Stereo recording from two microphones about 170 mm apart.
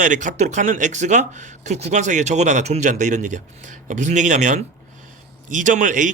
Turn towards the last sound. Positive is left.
turn(degrees=-50)  # may be behind; listen again after turning